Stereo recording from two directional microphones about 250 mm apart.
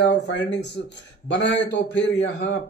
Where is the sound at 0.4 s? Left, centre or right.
Left.